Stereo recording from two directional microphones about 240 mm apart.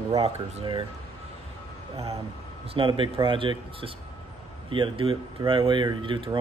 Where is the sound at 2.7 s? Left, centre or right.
Right.